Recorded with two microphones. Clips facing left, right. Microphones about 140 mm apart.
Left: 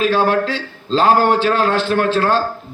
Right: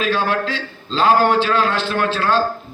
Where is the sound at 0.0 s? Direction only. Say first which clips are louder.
Left 4 dB; 40° left (ahead or behind).